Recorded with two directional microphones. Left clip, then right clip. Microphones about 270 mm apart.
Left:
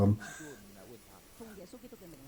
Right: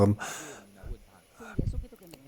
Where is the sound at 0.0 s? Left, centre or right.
Right.